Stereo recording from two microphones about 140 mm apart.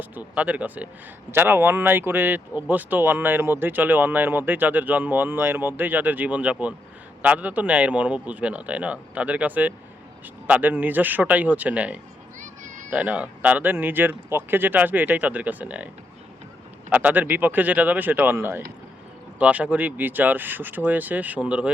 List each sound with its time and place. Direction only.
0.0 s speech: 10° right (ahead or behind)
12.4 s a sound: 65° right (ahead or behind)
12.9 s speech: 10° right (ahead or behind)
16.9 s speech: 10° right (ahead or behind)